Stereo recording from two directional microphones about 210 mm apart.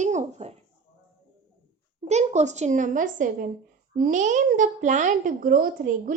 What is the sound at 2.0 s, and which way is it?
A child's voice, 35° right (ahead or behind).